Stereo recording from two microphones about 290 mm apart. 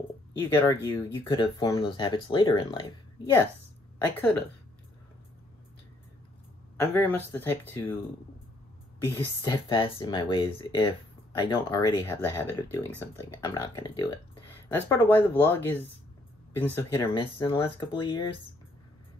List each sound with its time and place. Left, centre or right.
0.4 s speech: centre
6.8 s speech: centre
9.0 s speech: centre